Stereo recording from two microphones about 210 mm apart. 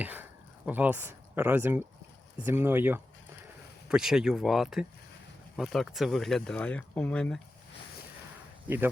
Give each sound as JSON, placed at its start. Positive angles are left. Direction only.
{"t": 0.0, "sound": "a sound", "side_deg": -10}
{"t": 2.4, "sound": "speech", "side_deg": -10}
{"t": 8.6, "sound": "speech", "side_deg": -10}